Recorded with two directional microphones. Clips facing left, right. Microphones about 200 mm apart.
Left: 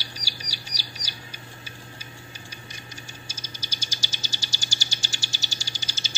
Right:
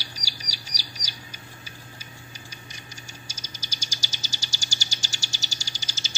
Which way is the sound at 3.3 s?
55° left (ahead or behind).